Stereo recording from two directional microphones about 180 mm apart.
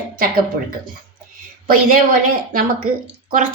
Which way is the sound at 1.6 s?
50° right (ahead or behind).